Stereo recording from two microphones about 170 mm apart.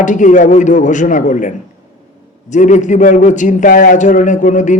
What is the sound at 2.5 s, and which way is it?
A man's voice, 45° left (ahead or behind).